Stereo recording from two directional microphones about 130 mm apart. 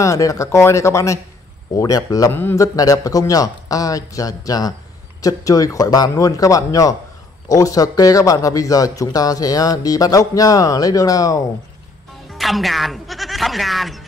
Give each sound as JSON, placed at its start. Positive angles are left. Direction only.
{"t": 0.0, "sound": "a man's voice", "side_deg": 25}
{"t": 12.4, "sound": "speech", "side_deg": 0}